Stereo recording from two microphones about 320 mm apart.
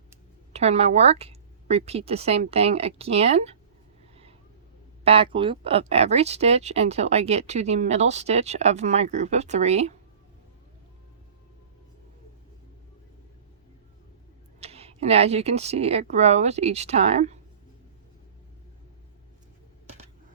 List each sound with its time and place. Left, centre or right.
0.5 s speech: centre
4.1 s a sound: centre
5.0 s speech: centre
14.6 s speech: centre